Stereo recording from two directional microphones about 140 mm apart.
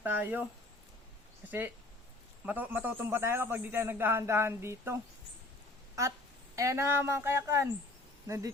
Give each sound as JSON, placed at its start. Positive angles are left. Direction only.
{"t": 0.0, "sound": "a man's voice", "side_deg": -15}
{"t": 1.5, "sound": "a man's voice", "side_deg": -15}
{"t": 6.6, "sound": "speech", "side_deg": -20}